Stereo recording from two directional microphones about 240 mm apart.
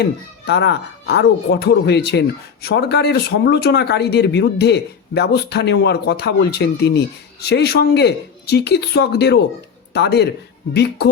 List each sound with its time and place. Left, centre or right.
0.0 s speech: left